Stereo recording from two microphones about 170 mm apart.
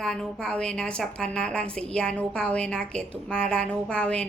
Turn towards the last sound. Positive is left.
turn(degrees=5)  # may be behind; listen again after turning